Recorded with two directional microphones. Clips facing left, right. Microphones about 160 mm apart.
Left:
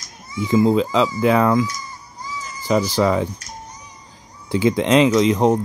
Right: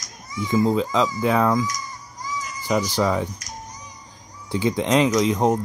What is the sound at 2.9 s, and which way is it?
Speech, 90° left.